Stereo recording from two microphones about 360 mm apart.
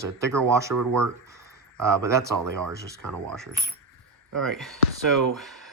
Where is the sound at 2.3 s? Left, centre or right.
Right.